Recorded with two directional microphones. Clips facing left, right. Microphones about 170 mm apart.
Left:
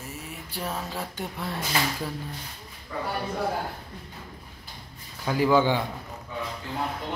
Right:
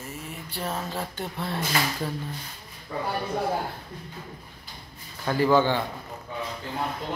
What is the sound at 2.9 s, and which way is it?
Speech, 25° right (ahead or behind).